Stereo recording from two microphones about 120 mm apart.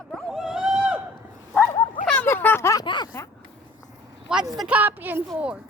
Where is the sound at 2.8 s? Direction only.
40° left (ahead or behind).